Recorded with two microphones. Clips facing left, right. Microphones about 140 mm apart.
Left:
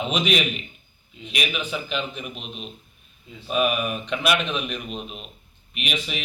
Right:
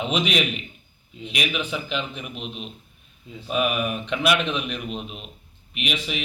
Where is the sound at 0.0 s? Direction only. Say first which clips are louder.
Even; 20° right (ahead or behind).